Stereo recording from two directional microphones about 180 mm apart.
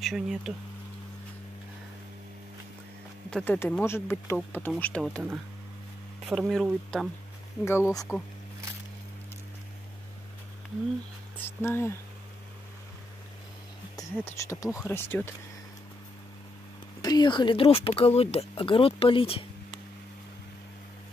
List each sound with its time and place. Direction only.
0.0 s speech: centre (ahead or behind)
3.3 s speech: 5° left (ahead or behind)
6.2 s speech: centre (ahead or behind)
7.6 s speech: 15° left (ahead or behind)
11.3 s speech: 15° left (ahead or behind)
14.2 s speech: 15° left (ahead or behind)
17.0 s speech: 25° left (ahead or behind)